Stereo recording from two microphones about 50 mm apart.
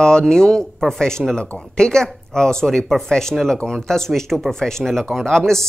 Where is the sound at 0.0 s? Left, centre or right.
Centre.